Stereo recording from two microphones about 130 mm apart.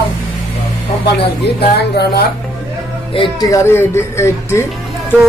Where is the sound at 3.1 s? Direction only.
40° left (ahead or behind).